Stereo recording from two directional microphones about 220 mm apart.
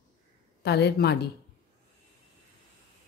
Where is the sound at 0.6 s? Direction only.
50° left (ahead or behind).